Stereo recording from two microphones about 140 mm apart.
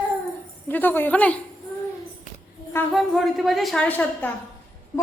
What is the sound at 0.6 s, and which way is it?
Speech, 15° left (ahead or behind).